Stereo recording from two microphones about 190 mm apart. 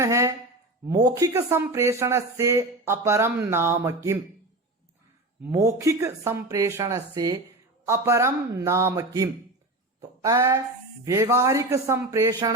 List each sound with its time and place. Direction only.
0.0 s speech: 15° right (ahead or behind)
5.5 s speech: 15° right (ahead or behind)